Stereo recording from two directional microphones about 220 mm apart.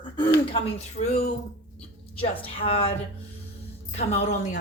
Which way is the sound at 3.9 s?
30° left (ahead or behind).